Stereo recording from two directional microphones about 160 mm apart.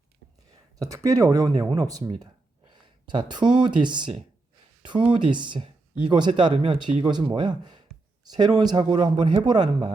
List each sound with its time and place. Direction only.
0.8 s speech: 20° right (ahead or behind)